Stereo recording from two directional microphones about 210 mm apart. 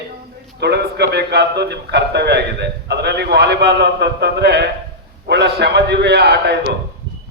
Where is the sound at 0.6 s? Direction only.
50° right (ahead or behind).